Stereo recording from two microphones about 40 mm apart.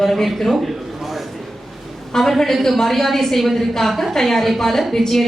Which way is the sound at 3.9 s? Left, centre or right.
Centre.